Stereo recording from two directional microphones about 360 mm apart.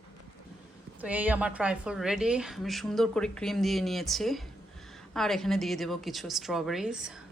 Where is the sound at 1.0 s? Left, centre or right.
Centre.